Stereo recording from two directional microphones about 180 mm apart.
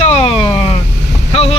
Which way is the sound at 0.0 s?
35° left (ahead or behind).